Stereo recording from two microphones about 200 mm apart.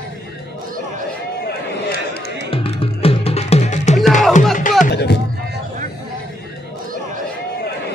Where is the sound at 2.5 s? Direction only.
30° left (ahead or behind).